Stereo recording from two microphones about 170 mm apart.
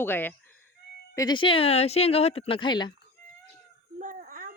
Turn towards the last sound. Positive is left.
turn(degrees=-55)  # may be behind; listen again after turning